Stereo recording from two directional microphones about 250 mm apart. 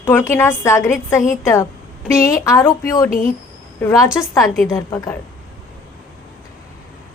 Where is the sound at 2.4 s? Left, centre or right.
Centre.